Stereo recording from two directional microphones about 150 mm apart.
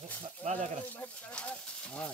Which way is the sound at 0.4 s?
50° right (ahead or behind).